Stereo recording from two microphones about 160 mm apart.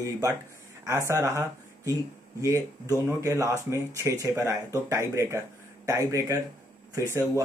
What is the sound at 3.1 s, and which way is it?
Speech, 20° right (ahead or behind).